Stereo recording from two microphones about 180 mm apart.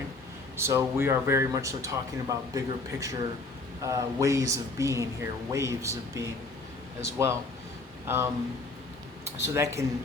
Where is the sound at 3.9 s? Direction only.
20° right (ahead or behind).